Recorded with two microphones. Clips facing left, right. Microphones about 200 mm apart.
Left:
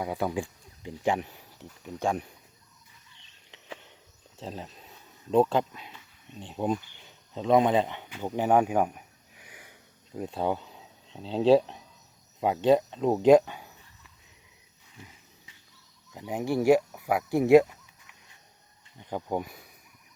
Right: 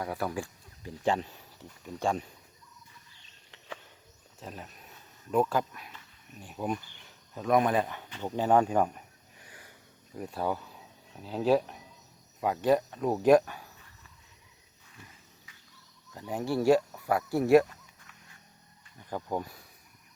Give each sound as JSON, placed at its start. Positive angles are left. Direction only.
{"t": 0.0, "sound": "speech", "side_deg": 20}
{"t": 4.4, "sound": "speech", "side_deg": 25}
{"t": 8.1, "sound": "a sound", "side_deg": 10}
{"t": 10.2, "sound": "speech", "side_deg": 20}
{"t": 16.1, "sound": "speech", "side_deg": 15}